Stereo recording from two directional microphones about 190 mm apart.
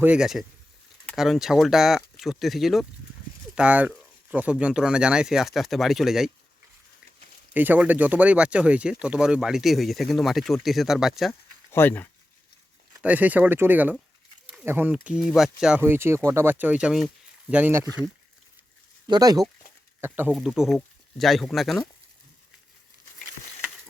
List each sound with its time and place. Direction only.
0.0 s speech: 5° right (ahead or behind)
7.5 s speech: 10° right (ahead or behind)
11.7 s speech: 10° left (ahead or behind)
13.0 s speech: 10° right (ahead or behind)
20.0 s speech: 10° right (ahead or behind)